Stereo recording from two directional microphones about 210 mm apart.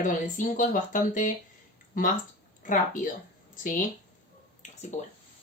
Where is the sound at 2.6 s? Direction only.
40° left (ahead or behind).